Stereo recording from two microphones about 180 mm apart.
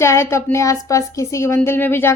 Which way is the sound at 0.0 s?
15° left (ahead or behind).